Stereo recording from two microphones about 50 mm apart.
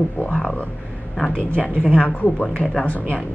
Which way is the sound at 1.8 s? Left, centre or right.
Left.